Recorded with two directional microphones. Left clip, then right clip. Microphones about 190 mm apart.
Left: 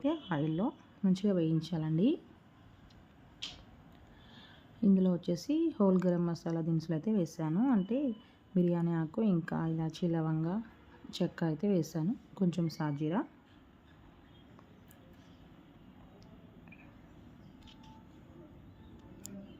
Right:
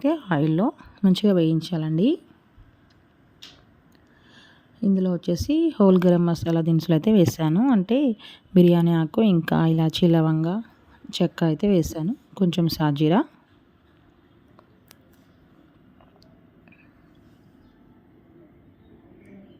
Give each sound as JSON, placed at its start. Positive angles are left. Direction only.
{"t": 0.0, "sound": "speech", "side_deg": -45}
{"t": 4.4, "sound": "speech", "side_deg": -30}